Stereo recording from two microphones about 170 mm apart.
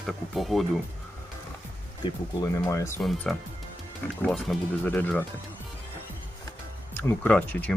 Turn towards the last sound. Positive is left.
turn(degrees=10)  # may be behind; listen again after turning